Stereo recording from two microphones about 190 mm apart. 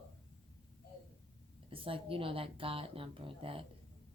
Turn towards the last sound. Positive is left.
turn(degrees=-30)  # may be behind; listen again after turning